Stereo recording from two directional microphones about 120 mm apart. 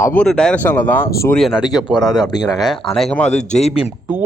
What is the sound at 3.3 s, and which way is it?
Speech, 75° left (ahead or behind).